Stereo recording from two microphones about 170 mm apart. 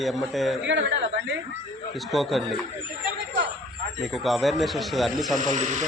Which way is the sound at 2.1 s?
Centre (ahead or behind).